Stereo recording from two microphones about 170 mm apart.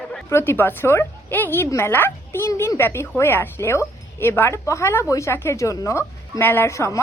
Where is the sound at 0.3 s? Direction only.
15° left (ahead or behind).